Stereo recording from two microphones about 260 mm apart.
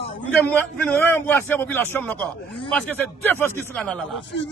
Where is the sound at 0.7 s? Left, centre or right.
Centre.